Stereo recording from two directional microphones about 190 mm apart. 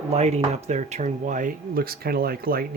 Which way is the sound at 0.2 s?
35° right (ahead or behind).